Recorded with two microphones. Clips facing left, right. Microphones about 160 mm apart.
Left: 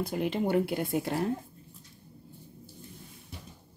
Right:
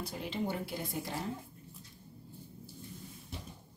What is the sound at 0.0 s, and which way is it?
Speech, 60° left (ahead or behind).